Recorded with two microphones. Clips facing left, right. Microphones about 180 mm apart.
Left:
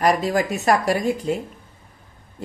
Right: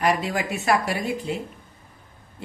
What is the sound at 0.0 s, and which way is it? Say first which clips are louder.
Speech: left 4 dB; 40° left (ahead or behind).